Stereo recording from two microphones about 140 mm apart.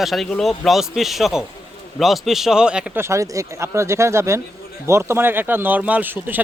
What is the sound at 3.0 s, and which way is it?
A man's voice, 20° right (ahead or behind).